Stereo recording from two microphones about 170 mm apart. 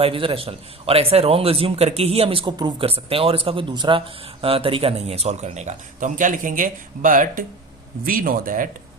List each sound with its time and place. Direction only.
0.0 s a man's voice: 30° right (ahead or behind); by 8.7 s 55° right (ahead or behind)